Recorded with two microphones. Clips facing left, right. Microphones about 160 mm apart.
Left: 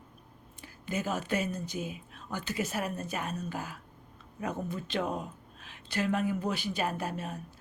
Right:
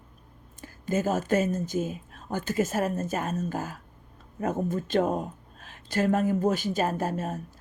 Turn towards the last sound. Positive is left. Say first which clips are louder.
# right 6 dB
turn(degrees=-45)  # may be behind; listen again after turning